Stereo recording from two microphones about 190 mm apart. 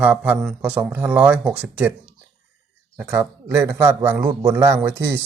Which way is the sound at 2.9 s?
10° right (ahead or behind).